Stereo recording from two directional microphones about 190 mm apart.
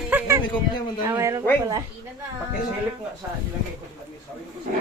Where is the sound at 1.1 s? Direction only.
15° right (ahead or behind).